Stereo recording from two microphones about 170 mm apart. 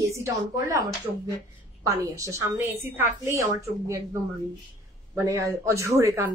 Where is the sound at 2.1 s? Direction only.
20° right (ahead or behind).